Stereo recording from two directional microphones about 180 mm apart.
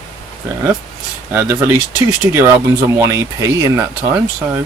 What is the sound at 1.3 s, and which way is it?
Speech, 15° right (ahead or behind).